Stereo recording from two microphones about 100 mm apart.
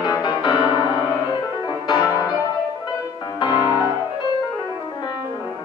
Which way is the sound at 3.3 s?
50° left (ahead or behind).